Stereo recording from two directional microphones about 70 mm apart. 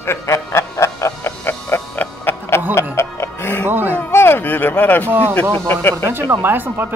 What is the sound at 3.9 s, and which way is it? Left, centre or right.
Speech, left.